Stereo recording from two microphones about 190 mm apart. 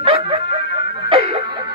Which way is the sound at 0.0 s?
30° right (ahead or behind).